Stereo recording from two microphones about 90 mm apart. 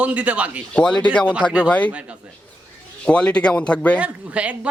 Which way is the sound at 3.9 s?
15° right (ahead or behind).